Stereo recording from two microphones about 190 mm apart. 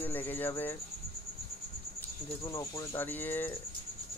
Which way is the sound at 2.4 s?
15° left (ahead or behind).